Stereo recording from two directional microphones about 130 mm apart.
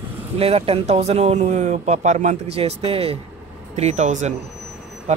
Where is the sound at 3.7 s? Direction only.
60° right (ahead or behind).